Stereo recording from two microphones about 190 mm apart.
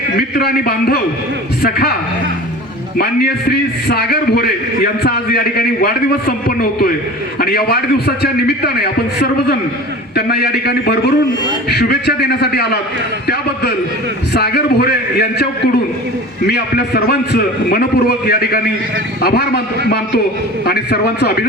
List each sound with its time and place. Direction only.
0.2 s a man's voice: 55° left (ahead or behind)
3.8 s a man's voice: 55° left (ahead or behind)